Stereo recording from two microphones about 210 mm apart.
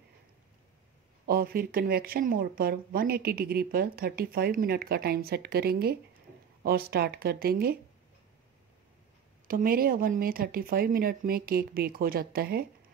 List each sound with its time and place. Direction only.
1.2 s speech: 45° right (ahead or behind)
9.5 s speech: 45° right (ahead or behind)